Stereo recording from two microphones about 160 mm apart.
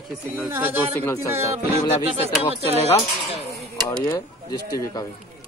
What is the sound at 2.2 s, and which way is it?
Speech, 40° right (ahead or behind).